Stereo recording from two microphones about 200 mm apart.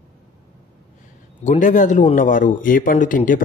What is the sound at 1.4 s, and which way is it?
A man's voice, 40° left (ahead or behind).